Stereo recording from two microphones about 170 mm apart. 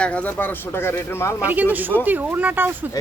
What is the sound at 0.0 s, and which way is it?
Speech, 10° left (ahead or behind).